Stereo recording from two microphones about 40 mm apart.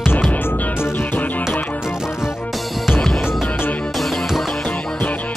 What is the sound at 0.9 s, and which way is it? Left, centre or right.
Music, left.